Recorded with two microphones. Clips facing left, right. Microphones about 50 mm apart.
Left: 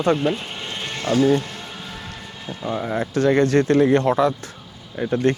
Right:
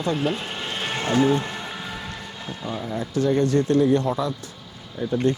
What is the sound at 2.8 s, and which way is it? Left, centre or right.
Speech, left.